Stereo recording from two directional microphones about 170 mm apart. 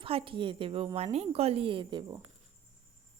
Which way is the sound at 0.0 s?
30° right (ahead or behind).